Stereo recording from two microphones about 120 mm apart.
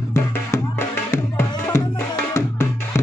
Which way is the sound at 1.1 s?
20° left (ahead or behind).